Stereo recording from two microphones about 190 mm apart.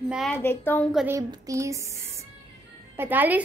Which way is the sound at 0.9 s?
10° right (ahead or behind).